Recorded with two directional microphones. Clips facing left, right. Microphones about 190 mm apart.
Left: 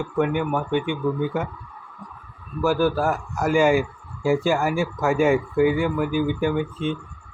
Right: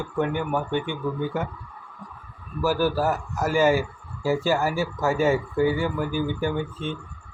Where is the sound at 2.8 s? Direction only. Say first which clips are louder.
Left 1 dB; 5° right (ahead or behind).